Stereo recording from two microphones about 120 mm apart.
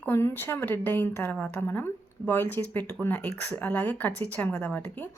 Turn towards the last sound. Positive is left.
turn(degrees=15)  # may be behind; listen again after turning